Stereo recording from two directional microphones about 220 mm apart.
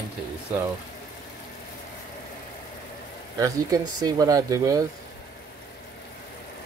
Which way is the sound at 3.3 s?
15° right (ahead or behind).